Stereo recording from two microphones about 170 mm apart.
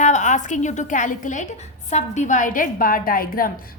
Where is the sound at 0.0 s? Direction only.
45° left (ahead or behind).